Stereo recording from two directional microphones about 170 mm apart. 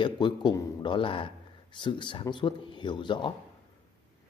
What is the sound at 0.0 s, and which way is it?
Speech, 25° left (ahead or behind).